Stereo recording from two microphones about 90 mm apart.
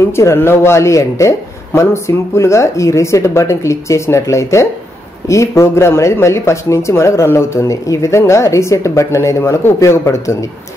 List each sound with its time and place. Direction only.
0.1 s speech: 30° left (ahead or behind)